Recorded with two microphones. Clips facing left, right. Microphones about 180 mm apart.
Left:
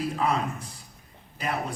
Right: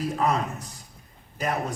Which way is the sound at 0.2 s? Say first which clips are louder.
Right 3 dB; 40° right (ahead or behind).